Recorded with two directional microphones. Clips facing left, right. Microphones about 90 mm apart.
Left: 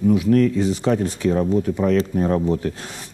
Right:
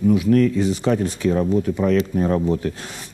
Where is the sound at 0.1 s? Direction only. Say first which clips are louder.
Even; 35° left (ahead or behind).